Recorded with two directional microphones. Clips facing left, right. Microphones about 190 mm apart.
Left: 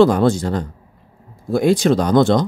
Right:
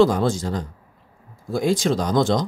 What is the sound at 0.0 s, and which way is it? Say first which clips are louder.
Speech: left 4 dB; 65° left (ahead or behind).